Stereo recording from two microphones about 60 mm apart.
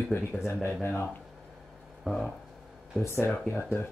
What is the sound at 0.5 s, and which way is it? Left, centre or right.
Speech, left.